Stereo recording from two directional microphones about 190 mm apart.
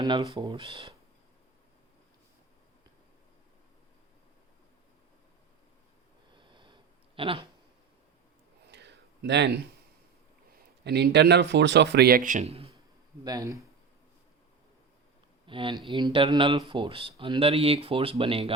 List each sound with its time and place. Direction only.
0.0 s speech: 20° right (ahead or behind)
6.3 s sniff: 25° right (ahead or behind)
7.2 s speech: 25° right (ahead or behind)
8.6 s a sound: 65° right (ahead or behind)
10.5 s speech: 60° right (ahead or behind); by 12.7 s 35° right (ahead or behind)
13.2 s speech: 20° right (ahead or behind)
15.4 s speech: 25° right (ahead or behind)